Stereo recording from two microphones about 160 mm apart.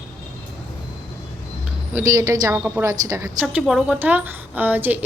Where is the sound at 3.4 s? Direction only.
5° right (ahead or behind).